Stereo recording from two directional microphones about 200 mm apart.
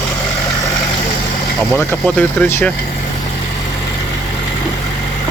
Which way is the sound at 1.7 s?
10° left (ahead or behind).